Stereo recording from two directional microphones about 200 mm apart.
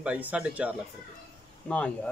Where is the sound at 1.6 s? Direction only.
5° left (ahead or behind).